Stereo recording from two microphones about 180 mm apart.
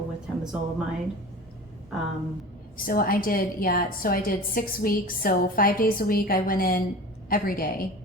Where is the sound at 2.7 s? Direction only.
50° left (ahead or behind).